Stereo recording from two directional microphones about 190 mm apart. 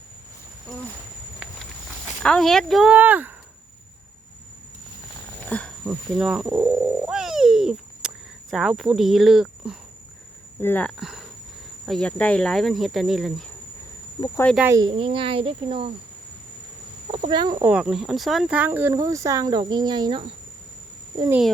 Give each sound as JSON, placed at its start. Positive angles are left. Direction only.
{"t": 1.4, "sound": "walk", "side_deg": -5}
{"t": 2.2, "sound": "speech", "side_deg": 5}
{"t": 5.5, "sound": "a sound", "side_deg": 5}
{"t": 5.8, "sound": "a sound", "side_deg": -5}
{"t": 10.6, "sound": "speech", "side_deg": 10}
{"t": 14.6, "sound": "speech", "side_deg": -15}
{"t": 14.8, "sound": "speech", "side_deg": -30}
{"t": 17.1, "sound": "speech", "side_deg": -30}
{"t": 17.6, "sound": "speech", "side_deg": -5}